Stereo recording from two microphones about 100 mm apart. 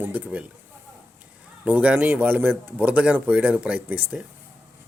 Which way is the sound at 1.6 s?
15° right (ahead or behind).